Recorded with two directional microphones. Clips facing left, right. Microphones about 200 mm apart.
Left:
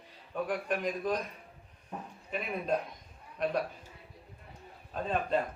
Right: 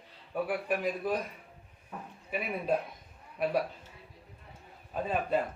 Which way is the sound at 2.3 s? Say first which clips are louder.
Right 1 dB; 5° right (ahead or behind).